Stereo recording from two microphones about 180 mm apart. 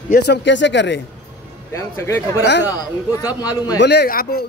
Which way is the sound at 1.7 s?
15° left (ahead or behind).